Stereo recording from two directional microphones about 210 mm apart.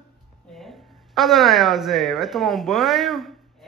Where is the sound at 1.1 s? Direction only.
Centre (ahead or behind).